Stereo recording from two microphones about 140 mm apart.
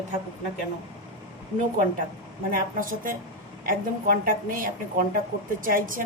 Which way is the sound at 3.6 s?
90° right.